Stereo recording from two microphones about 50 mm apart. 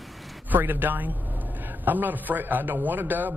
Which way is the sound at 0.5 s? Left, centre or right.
Right.